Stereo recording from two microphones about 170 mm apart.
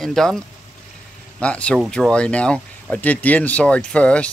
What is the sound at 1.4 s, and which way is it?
Speech, 5° left (ahead or behind).